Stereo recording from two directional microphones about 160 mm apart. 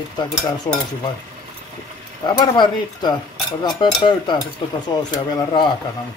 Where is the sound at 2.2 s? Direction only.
25° left (ahead or behind).